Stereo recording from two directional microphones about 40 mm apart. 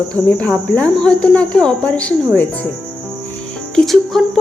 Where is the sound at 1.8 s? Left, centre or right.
Left.